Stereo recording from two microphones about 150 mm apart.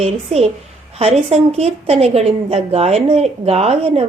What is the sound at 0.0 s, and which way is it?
Speech, 45° right (ahead or behind).